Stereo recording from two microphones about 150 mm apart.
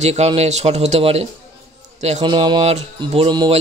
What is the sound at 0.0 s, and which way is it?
A man's voice, 45° right (ahead or behind).